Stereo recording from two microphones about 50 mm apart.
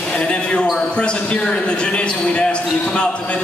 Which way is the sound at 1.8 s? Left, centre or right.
Centre.